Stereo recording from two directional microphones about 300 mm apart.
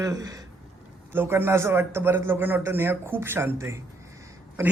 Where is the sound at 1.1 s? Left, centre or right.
Centre.